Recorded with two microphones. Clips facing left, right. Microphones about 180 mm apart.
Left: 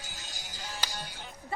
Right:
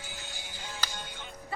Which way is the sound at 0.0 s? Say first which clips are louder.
Right 2 dB; 40° left (ahead or behind).